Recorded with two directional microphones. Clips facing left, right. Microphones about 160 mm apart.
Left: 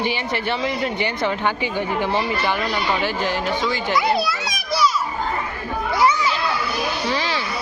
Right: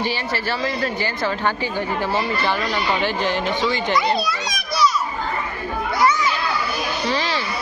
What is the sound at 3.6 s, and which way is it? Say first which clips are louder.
Children playing: right 2 dB; centre (ahead or behind).